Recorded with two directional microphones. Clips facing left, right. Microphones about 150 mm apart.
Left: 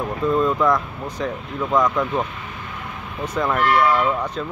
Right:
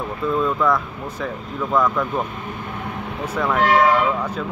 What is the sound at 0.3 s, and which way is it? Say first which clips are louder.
Speech: left 1 dB; 5° left (ahead or behind).